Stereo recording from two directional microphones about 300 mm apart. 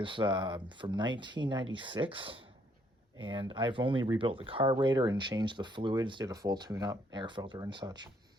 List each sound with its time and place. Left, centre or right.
0.0 s speech: centre